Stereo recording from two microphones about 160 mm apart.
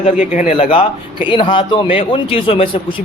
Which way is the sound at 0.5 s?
35° left (ahead or behind).